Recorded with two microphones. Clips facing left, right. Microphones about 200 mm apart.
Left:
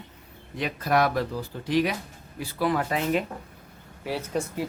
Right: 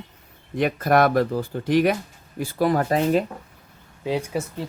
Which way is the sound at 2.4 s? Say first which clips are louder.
Right 5 dB; 45° right (ahead or behind).